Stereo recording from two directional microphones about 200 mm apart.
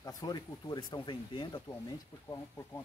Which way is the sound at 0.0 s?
20° left (ahead or behind).